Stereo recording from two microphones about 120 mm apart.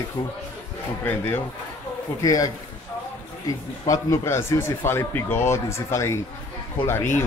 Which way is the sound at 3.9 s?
25° left (ahead or behind).